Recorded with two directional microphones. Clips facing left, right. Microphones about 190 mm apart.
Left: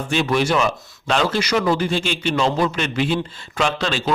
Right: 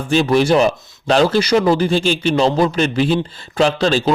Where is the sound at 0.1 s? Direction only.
35° right (ahead or behind).